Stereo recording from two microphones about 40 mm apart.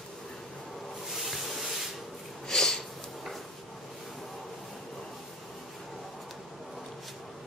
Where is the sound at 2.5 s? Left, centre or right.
Centre.